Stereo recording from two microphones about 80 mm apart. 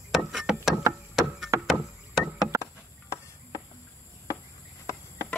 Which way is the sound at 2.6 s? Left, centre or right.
Left.